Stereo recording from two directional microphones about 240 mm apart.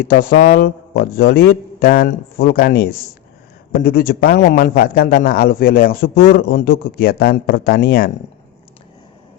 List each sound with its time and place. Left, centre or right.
0.0 s a man's voice: left